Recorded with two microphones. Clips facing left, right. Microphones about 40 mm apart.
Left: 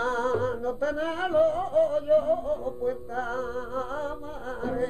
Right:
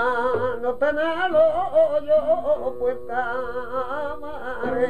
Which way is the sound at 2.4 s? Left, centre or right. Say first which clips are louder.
Right 6 dB; right.